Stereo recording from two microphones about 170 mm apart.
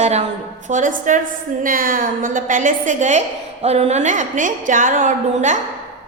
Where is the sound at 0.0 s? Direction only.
40° right (ahead or behind).